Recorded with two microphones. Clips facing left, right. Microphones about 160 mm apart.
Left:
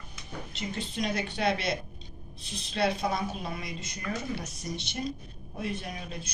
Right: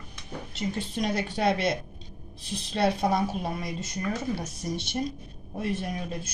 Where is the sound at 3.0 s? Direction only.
45° right (ahead or behind).